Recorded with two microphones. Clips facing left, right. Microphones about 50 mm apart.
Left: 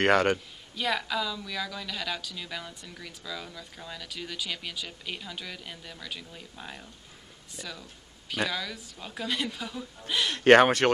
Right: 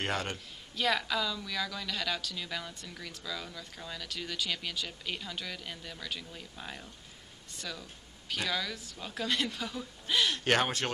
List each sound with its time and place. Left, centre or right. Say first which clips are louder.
0.0 s speech: left 11 dB; left
0.7 s a woman's voice: left 1 dB; centre
10.2 s speech: left 12 dB; left